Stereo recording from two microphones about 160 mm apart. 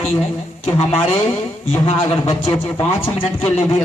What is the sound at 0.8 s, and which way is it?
Speech, 35° left (ahead or behind).